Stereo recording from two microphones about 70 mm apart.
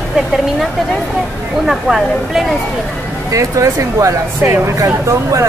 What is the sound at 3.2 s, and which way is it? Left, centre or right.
Speech, right.